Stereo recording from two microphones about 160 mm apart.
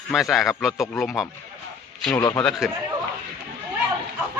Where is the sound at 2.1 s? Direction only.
20° left (ahead or behind).